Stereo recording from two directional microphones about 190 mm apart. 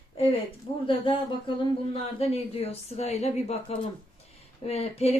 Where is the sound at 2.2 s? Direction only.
30° left (ahead or behind).